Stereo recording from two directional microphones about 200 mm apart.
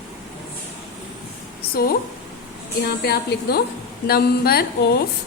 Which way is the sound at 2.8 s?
50° left (ahead or behind).